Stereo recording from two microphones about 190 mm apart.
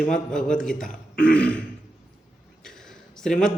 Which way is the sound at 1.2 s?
5° left (ahead or behind).